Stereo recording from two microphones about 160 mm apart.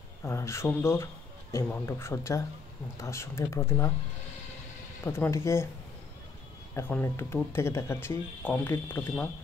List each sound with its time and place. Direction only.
0.2 s speech: 15° left (ahead or behind)
5.0 s speech: 15° left (ahead or behind)
6.7 s speech: 15° left (ahead or behind)